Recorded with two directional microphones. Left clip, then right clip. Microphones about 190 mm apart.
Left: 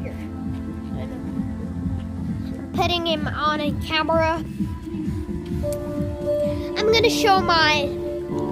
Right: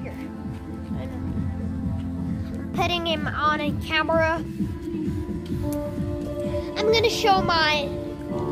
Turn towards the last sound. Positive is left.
turn(degrees=30)  # may be behind; listen again after turning